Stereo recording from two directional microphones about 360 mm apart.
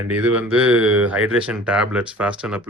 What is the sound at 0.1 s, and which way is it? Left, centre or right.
Speech, centre.